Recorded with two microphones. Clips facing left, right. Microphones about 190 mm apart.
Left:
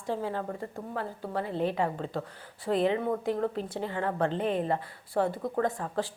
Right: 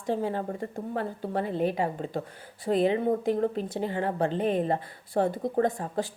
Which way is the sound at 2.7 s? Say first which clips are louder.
Right 2 dB; 35° right (ahead or behind).